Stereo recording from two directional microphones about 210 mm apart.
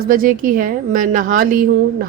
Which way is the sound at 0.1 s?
40° right (ahead or behind).